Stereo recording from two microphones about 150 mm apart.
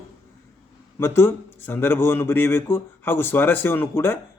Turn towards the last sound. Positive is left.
turn(degrees=15)  # may be behind; listen again after turning